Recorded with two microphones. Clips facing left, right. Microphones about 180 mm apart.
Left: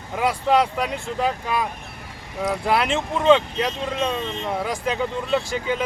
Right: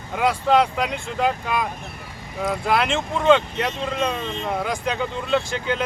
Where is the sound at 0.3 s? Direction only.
5° left (ahead or behind).